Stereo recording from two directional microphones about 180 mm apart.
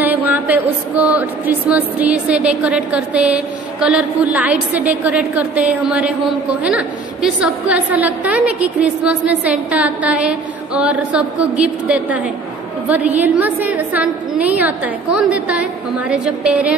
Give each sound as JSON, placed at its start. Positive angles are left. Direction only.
{"t": 0.0, "sound": "speech", "side_deg": -10}